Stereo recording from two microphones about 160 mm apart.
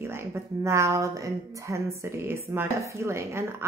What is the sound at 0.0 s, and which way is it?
A woman's voice, 15° right (ahead or behind).